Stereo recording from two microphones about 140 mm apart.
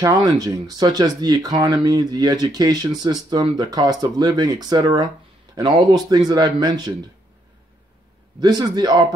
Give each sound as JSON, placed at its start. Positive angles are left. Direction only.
{"t": 0.0, "sound": "speech", "side_deg": -25}
{"t": 8.4, "sound": "speech", "side_deg": -30}